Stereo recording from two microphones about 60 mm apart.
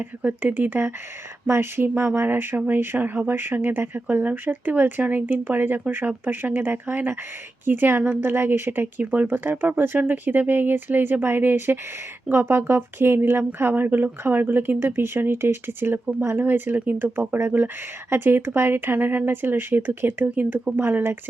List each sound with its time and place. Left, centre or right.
0.0 s speech: right